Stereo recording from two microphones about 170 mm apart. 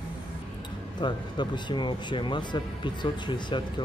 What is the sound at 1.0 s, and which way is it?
Speech, 25° left (ahead or behind).